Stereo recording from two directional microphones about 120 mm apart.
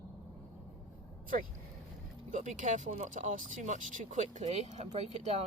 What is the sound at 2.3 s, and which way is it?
Speech, 90° right.